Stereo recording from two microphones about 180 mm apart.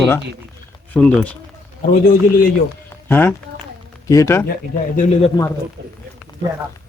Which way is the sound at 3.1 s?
10° left (ahead or behind).